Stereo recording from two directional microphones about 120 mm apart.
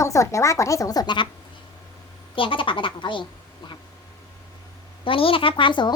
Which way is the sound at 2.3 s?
45° left (ahead or behind).